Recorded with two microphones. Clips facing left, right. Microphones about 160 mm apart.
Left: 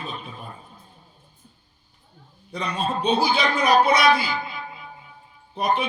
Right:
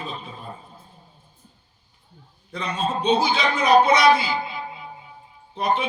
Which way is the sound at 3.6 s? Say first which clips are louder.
Right 3 dB; 25° right (ahead or behind).